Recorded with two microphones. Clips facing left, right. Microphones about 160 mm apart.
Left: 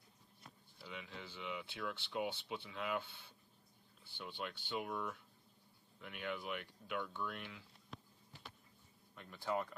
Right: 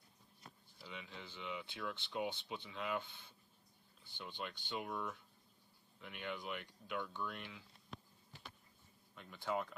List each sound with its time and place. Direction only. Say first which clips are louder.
0.7 s speech: left 1 dB; centre (ahead or behind)
9.1 s speech: left 1 dB; centre (ahead or behind)